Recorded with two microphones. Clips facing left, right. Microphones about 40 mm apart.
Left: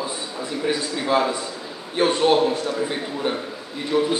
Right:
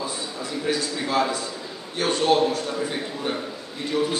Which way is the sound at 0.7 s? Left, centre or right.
Left.